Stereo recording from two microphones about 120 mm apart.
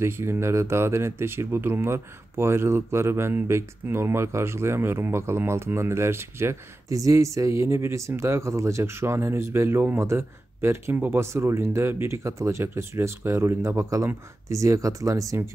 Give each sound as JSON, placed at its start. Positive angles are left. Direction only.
{"t": 0.0, "sound": "speech", "side_deg": -20}